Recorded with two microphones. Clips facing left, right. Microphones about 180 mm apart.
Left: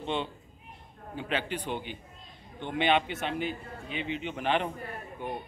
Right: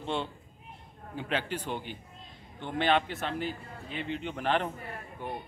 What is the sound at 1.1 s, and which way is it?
Speech, 10° right (ahead or behind).